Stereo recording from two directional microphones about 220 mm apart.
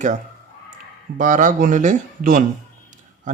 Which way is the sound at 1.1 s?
35° right (ahead or behind).